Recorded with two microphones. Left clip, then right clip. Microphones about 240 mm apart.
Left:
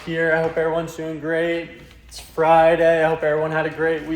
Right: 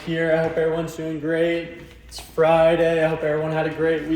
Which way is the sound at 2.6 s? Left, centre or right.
Centre.